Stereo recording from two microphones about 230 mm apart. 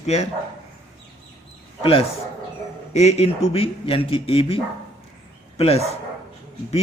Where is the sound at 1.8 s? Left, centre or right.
Left.